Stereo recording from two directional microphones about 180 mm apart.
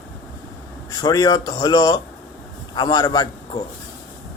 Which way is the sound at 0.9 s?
20° left (ahead or behind).